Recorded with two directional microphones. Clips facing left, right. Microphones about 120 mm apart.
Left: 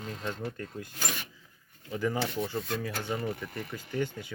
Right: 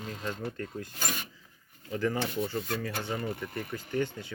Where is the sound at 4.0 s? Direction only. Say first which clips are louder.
Right 1 dB; 10° left (ahead or behind).